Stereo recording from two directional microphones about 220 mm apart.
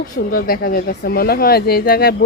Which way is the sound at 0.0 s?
40° left (ahead or behind).